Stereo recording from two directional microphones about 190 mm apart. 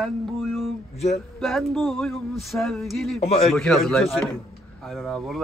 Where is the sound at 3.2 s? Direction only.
30° left (ahead or behind).